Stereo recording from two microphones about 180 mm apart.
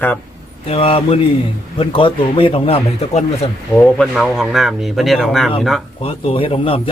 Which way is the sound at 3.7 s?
5° left (ahead or behind).